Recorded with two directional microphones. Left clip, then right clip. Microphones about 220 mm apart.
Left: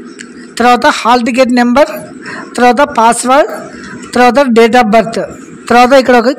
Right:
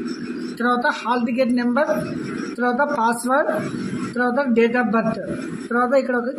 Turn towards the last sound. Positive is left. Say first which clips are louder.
# left 14 dB
turn(degrees=50)  # may be behind; listen again after turning